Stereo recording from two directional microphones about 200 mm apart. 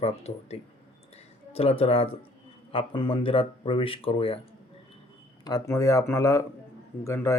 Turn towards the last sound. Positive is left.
turn(degrees=15)  # may be behind; listen again after turning